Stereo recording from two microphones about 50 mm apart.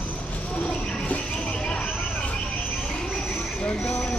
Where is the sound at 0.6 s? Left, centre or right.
Left.